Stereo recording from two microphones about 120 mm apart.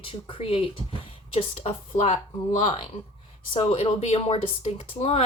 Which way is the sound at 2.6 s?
70° left (ahead or behind).